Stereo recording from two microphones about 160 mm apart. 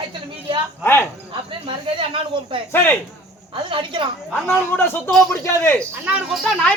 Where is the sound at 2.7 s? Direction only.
15° left (ahead or behind).